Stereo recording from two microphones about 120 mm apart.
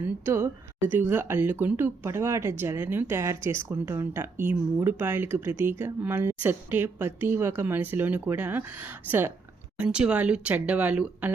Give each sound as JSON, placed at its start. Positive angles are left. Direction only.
{"t": 0.0, "sound": "speech", "side_deg": -20}